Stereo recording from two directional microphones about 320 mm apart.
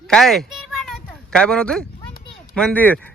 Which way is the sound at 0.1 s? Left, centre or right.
Centre.